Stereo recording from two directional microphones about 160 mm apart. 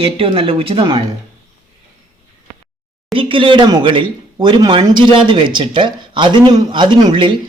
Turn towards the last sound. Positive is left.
turn(degrees=-30)  # may be behind; listen again after turning